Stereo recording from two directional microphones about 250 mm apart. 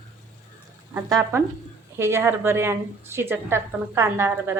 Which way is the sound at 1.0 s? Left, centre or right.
Centre.